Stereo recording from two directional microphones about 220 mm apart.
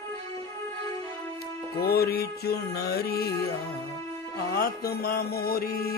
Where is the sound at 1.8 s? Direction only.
45° left (ahead or behind).